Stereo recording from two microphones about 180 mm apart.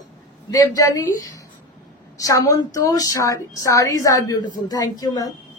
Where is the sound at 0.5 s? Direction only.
20° left (ahead or behind).